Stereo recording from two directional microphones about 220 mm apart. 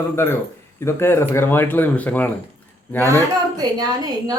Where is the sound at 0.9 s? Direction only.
10° left (ahead or behind).